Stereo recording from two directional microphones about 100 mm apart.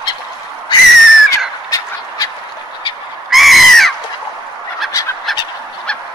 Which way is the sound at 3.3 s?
Centre (ahead or behind).